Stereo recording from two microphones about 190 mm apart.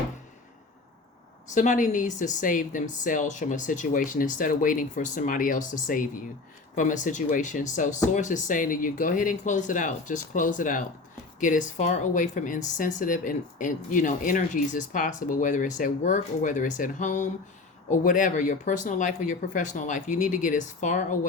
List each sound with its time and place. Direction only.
1.5 s a woman's voice: 40° left (ahead or behind)